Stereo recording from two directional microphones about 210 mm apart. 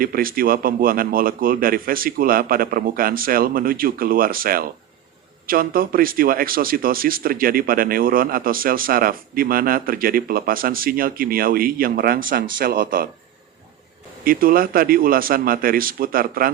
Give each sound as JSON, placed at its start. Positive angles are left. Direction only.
{"t": 0.0, "sound": "speech", "side_deg": -45}
{"t": 14.3, "sound": "speech", "side_deg": -45}